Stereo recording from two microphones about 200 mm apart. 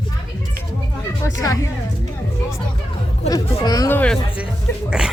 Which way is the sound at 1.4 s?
15° left (ahead or behind).